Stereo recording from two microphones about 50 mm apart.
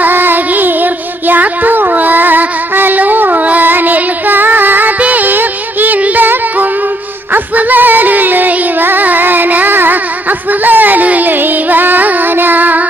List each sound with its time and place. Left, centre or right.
0.0 s child singing: right
1.3 s music: right
7.3 s music: right